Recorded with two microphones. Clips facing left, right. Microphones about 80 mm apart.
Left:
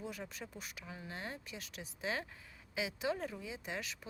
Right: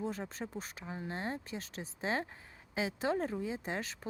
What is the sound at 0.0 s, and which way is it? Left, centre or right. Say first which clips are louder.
Speech: right 6 dB; right.